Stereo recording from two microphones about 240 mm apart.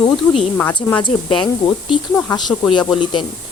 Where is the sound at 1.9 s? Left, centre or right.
Centre.